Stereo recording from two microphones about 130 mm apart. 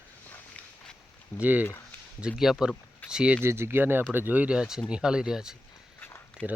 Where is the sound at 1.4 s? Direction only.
10° right (ahead or behind).